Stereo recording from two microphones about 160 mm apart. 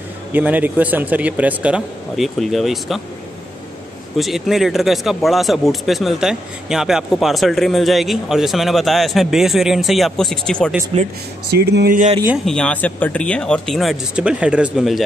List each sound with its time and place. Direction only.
0.3 s a man's voice: 10° right (ahead or behind)
4.2 s speech: centre (ahead or behind)
10.9 s speech: 35° right (ahead or behind)
11.5 s speech: 80° right
12.4 s speech: 5° left (ahead or behind)